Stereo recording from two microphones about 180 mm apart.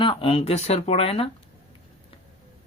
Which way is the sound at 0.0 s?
25° left (ahead or behind).